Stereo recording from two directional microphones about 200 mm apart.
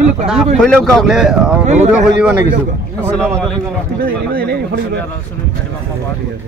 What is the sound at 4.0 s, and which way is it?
Speech, 50° right (ahead or behind).